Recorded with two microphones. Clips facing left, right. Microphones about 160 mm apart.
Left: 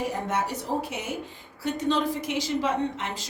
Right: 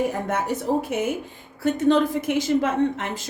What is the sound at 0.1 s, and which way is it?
A woman's voice, 50° right (ahead or behind).